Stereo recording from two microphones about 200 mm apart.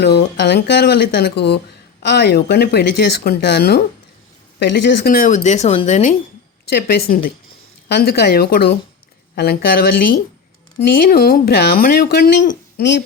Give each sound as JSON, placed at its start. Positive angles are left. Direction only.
{"t": 0.0, "sound": "speech", "side_deg": 55}
{"t": 6.7, "sound": "speech", "side_deg": 50}